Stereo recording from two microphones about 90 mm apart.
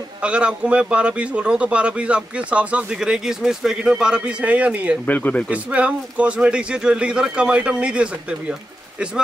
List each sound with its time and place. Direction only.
0.2 s speech: 10° right (ahead or behind)
5.0 s speech: 20° left (ahead or behind)
5.5 s speech: 15° right (ahead or behind)